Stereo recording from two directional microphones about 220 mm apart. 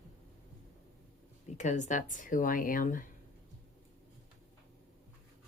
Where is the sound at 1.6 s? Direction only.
35° left (ahead or behind).